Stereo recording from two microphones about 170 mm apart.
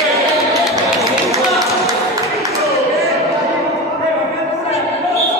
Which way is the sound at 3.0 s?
Centre (ahead or behind).